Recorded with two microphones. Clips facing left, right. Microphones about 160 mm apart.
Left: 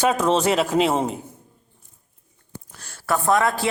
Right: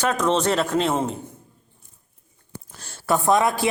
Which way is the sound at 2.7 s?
30° right (ahead or behind).